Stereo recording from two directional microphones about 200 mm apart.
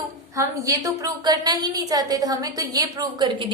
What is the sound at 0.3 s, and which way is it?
A woman's voice, 15° right (ahead or behind).